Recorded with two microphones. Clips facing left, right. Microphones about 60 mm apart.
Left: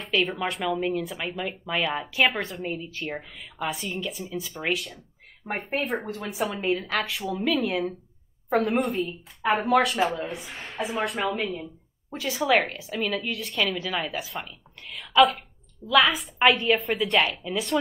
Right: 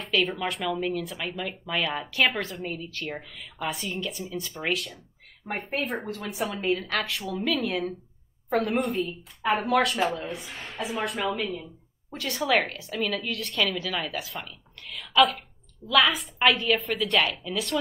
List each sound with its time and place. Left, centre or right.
0.1 s a woman's voice: centre
11.3 s a woman's voice: centre
12.1 s a woman's voice: centre